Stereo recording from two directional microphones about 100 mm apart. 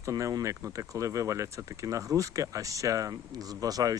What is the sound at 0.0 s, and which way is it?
Speech, 35° right (ahead or behind).